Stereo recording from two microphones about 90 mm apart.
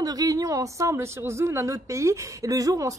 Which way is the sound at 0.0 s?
45° right (ahead or behind).